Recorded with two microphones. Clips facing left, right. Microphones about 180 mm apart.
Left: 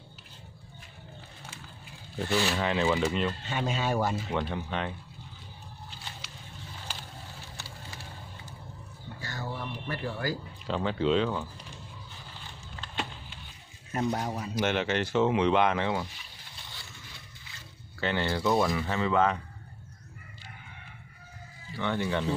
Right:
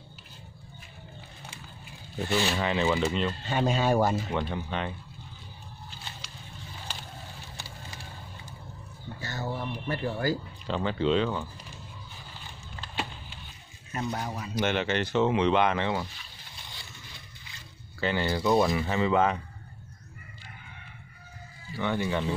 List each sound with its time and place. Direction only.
2.2 s speech: 20° right (ahead or behind)
2.5 s speech: centre (ahead or behind)
3.4 s speech: 40° right (ahead or behind)
4.3 s speech: centre (ahead or behind)
9.2 s a sound: 25° right (ahead or behind)
10.7 s speech: centre (ahead or behind)
13.9 s speech: 35° left (ahead or behind)
14.5 s speech: centre (ahead or behind)
18.0 s speech: 5° right (ahead or behind)
18.5 s speech: 20° right (ahead or behind)
21.7 s speech: 10° right (ahead or behind)